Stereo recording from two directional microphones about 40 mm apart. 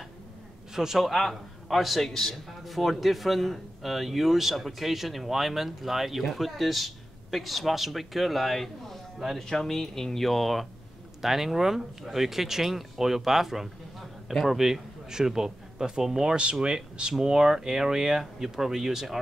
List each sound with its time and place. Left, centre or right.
0.7 s a man's voice: centre